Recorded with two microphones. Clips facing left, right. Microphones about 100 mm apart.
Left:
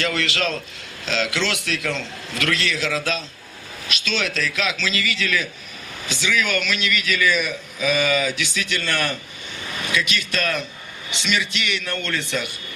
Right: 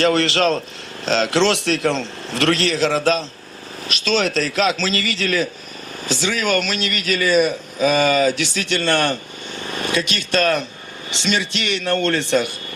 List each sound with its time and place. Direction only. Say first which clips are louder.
0.0 s a man's voice: right 7 dB; 35° right (ahead or behind)